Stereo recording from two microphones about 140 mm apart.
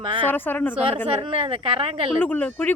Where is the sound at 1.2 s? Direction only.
40° right (ahead or behind).